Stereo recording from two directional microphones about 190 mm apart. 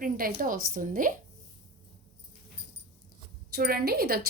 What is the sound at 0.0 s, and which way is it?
A woman's voice, 50° right (ahead or behind).